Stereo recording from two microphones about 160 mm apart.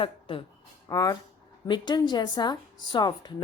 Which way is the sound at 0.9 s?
20° left (ahead or behind).